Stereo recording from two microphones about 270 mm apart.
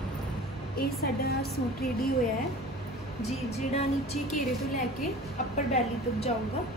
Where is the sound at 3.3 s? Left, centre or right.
Left.